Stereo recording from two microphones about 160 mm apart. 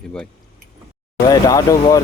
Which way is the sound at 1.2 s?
25° left (ahead or behind).